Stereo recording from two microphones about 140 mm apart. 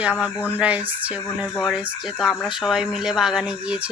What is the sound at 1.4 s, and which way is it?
Speech, centre (ahead or behind).